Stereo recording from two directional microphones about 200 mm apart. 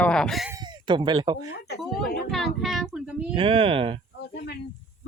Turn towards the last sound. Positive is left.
turn(degrees=55)  # may be behind; listen again after turning